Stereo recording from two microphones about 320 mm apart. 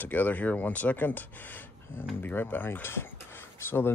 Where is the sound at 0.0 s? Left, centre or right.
Centre.